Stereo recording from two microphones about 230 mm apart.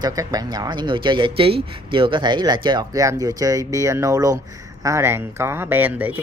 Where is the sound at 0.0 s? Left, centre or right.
Centre.